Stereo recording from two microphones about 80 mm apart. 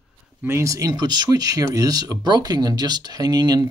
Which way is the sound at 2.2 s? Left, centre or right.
Right.